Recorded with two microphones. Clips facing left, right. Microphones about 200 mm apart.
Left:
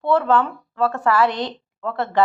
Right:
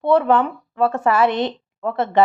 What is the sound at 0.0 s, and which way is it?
A woman's voice, 20° right (ahead or behind).